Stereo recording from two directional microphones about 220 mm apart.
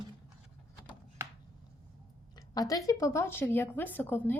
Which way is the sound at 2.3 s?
15° left (ahead or behind).